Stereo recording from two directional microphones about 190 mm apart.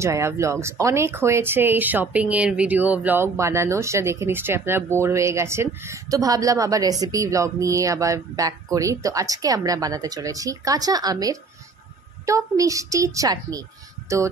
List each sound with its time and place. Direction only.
0.0 s speech: 15° right (ahead or behind)